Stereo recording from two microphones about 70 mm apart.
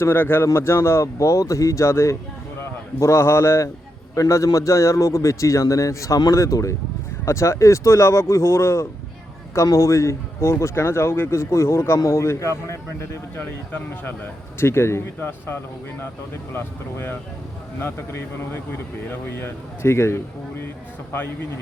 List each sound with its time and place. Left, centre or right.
0.0 s a man's voice: left
13.3 s speech: left